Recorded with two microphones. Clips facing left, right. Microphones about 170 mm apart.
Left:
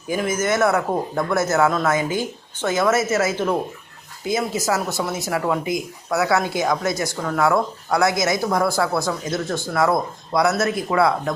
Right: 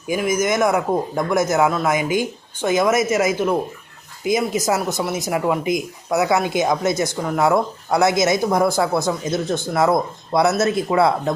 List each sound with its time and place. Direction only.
0.1 s a man's voice: 15° right (ahead or behind)